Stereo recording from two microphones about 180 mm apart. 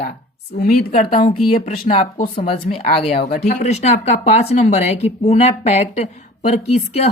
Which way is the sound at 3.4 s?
40° left (ahead or behind).